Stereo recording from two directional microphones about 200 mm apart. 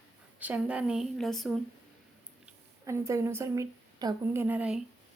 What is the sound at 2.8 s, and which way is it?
A woman's voice, 15° right (ahead or behind).